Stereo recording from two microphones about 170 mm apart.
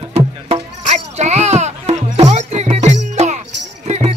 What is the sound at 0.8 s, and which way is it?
Music, 40° right (ahead or behind).